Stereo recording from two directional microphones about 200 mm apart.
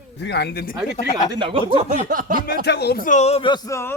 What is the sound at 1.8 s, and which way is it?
Speech, 40° right (ahead or behind).